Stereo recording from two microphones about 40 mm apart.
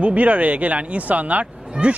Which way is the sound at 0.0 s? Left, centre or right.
Right.